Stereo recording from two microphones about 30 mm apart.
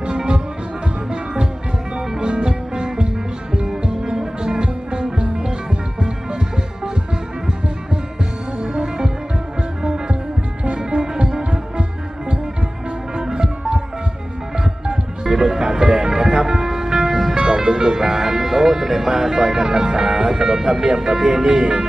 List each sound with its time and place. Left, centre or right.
2.0 s music: right
8.5 s music: right
10.8 s music: right
13.1 s music: right
15.2 s music: centre
21.3 s speech: right